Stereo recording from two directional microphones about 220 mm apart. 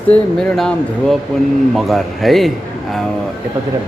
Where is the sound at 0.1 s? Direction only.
Centre (ahead or behind).